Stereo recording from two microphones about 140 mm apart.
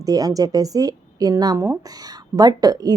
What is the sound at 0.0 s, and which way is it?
Speech, 25° right (ahead or behind).